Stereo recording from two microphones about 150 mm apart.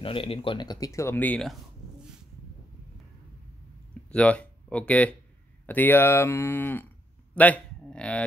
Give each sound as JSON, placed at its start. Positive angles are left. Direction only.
{"t": 0.0, "sound": "speech", "side_deg": 35}
{"t": 4.1, "sound": "speech", "side_deg": 10}